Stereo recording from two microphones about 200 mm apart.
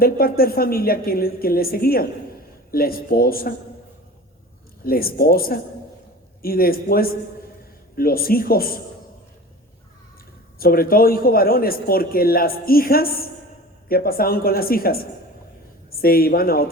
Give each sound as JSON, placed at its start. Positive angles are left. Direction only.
{"t": 0.0, "sound": "speech", "side_deg": 50}
{"t": 4.9, "sound": "speech", "side_deg": 50}
{"t": 10.6, "sound": "speech", "side_deg": 45}
{"t": 16.0, "sound": "speech", "side_deg": 50}